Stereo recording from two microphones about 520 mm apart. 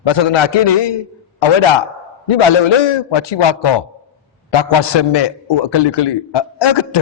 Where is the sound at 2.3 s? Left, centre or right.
Left.